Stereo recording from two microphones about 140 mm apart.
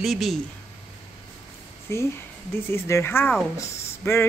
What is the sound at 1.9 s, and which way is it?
Speech, 20° left (ahead or behind).